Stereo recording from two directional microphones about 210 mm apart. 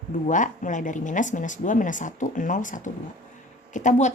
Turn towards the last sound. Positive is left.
turn(degrees=35)  # may be behind; listen again after turning